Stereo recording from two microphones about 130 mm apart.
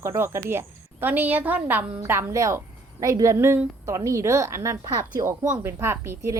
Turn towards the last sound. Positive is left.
turn(degrees=-20)  # may be behind; listen again after turning